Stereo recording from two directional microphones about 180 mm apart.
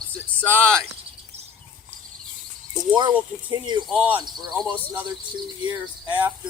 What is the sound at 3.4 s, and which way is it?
Speech, 25° right (ahead or behind).